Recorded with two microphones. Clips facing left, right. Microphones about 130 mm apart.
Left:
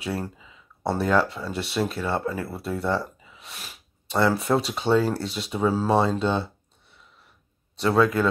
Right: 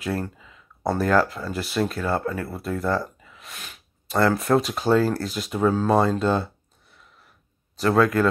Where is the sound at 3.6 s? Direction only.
5° left (ahead or behind).